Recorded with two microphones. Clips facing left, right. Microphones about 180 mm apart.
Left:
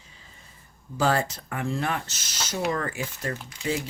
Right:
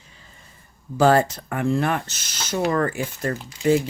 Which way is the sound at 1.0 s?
55° right (ahead or behind).